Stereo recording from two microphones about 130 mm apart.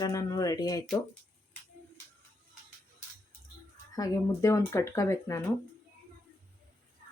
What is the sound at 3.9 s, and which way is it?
Speech, 25° left (ahead or behind).